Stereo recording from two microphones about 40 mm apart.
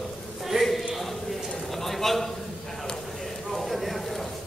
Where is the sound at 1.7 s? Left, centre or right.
Centre.